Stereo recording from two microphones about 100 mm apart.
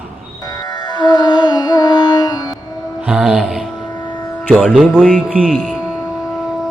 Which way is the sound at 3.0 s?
5° right (ahead or behind).